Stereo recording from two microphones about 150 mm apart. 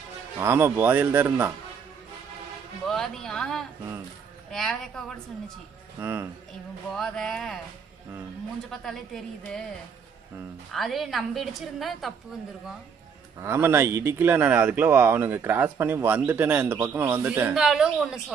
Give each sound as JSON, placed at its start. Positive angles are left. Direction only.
{"t": 0.3, "sound": "speech", "side_deg": -15}
{"t": 2.8, "sound": "a woman's voice", "side_deg": 0}
{"t": 6.0, "sound": "speech", "side_deg": -15}
{"t": 6.9, "sound": "a woman's voice", "side_deg": 0}
{"t": 8.7, "sound": "a woman's voice", "side_deg": 0}
{"t": 10.7, "sound": "a woman's voice", "side_deg": 0}
{"t": 13.4, "sound": "speech", "side_deg": -15}